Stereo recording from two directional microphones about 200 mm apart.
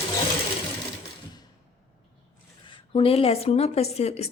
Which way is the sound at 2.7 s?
25° left (ahead or behind).